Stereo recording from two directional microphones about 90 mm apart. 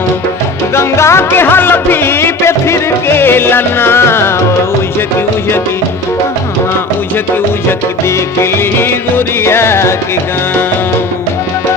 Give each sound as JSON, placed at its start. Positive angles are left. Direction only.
{"t": 0.8, "sound": "music", "side_deg": 30}
{"t": 8.4, "sound": "music", "side_deg": 25}